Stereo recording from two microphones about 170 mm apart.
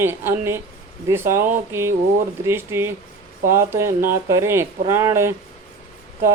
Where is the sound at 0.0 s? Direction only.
15° right (ahead or behind).